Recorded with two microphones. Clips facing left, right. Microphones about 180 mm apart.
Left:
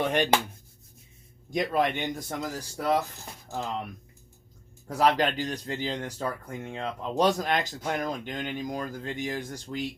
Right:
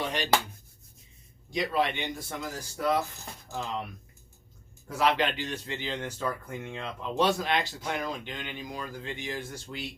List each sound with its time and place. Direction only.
0.0 s speech: 55° left (ahead or behind)
1.5 s speech: 45° left (ahead or behind)
4.9 s speech: 40° left (ahead or behind)